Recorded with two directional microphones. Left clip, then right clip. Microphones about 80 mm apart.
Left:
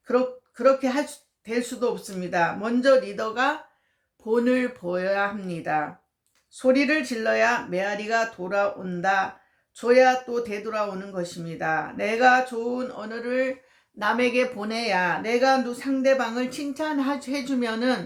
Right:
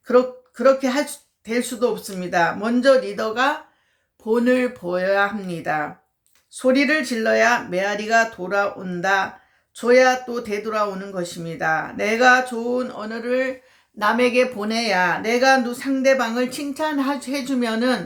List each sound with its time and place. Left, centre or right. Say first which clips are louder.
0.0 s speech: right 6 dB; right